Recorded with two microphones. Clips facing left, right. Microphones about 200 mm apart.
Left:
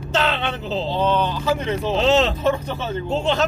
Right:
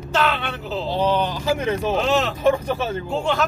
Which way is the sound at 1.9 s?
25° left (ahead or behind).